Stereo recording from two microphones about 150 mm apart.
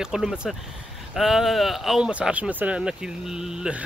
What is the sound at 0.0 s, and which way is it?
Speech, 5° right (ahead or behind).